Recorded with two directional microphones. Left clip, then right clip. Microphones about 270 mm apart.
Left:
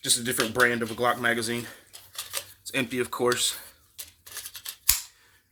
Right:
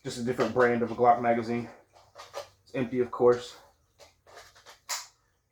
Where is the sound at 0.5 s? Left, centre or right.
Left.